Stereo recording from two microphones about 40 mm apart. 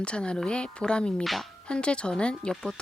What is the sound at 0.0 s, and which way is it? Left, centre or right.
Speech, left.